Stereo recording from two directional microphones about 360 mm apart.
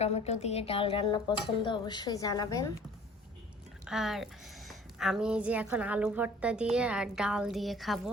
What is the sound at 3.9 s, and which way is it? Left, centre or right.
A woman's voice, centre.